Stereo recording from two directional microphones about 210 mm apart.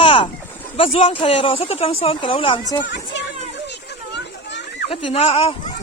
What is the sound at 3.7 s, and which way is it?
Children playing, 55° left (ahead or behind).